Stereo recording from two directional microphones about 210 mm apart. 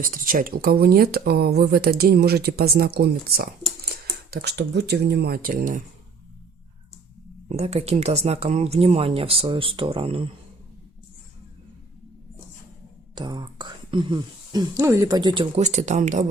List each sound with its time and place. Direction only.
0.0 s speech: 40° right (ahead or behind)
7.5 s speech: 30° right (ahead or behind)
13.1 s speech: 20° right (ahead or behind)